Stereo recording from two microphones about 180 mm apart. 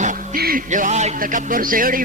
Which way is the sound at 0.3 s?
55° right (ahead or behind).